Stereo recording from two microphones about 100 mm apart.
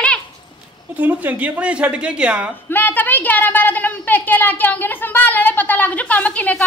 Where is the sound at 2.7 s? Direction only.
20° left (ahead or behind).